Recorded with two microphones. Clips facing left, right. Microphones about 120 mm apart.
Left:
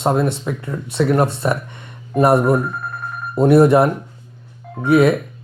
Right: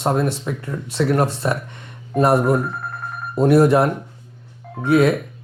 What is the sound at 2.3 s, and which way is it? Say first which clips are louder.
Speech: left 2 dB; 20° left (ahead or behind).